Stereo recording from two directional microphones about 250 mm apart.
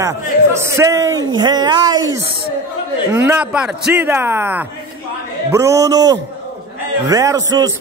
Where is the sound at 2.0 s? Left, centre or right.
Right.